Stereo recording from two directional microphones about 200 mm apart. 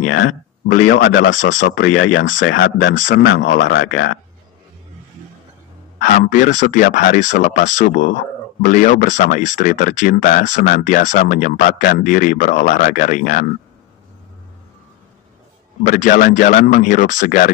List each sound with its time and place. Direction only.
0.0 s a sound: 90° left
0.7 s speech: 45° left (ahead or behind); by 1.3 s 60° left (ahead or behind)
2.0 s speech: 90° left
2.4 s speech: 70° left (ahead or behind)
2.9 s speech: 40° left (ahead or behind)
3.5 s speech: 65° left (ahead or behind); by 4.1 s 85° left
5.9 s speech: 40° left (ahead or behind)
15.9 s speech: 40° left (ahead or behind)